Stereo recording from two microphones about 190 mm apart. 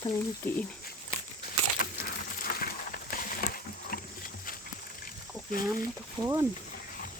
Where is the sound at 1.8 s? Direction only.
50° left (ahead or behind).